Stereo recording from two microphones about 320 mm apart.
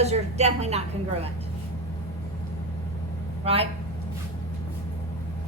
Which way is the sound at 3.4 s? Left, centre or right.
Centre.